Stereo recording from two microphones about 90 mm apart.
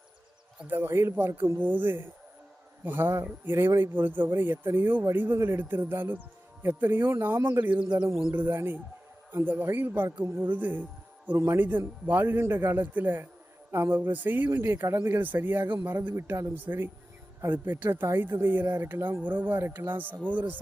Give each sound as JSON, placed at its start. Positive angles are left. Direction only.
{"t": 0.7, "sound": "speech", "side_deg": -25}